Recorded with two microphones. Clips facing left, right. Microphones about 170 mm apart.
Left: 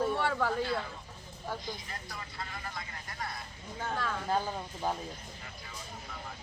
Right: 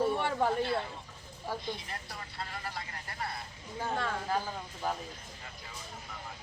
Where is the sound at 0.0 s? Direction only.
15° right (ahead or behind).